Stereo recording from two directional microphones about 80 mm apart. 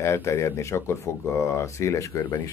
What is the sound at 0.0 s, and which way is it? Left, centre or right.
Speech, left.